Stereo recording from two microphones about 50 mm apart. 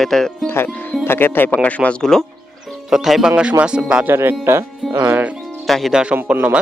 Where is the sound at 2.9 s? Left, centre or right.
Centre.